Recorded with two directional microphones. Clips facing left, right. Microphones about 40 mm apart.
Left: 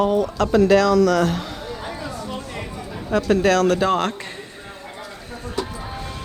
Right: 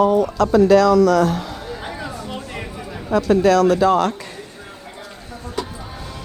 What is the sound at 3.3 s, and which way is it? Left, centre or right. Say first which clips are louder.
Speech: right 3 dB; left.